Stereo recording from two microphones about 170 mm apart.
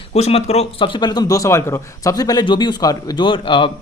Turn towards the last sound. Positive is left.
turn(degrees=30)  # may be behind; listen again after turning